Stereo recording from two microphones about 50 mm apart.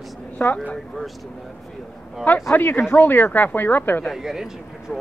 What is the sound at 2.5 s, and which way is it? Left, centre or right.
Speech, left.